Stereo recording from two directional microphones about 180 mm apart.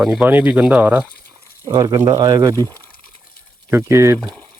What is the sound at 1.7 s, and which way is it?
Speech, 20° right (ahead or behind).